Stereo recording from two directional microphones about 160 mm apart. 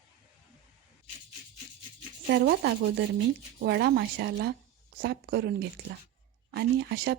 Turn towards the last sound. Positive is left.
turn(degrees=-85)